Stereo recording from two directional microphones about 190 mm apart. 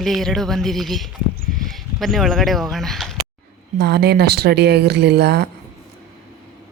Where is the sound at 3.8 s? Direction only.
60° right (ahead or behind).